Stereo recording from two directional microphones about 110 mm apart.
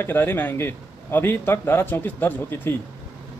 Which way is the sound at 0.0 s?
20° left (ahead or behind).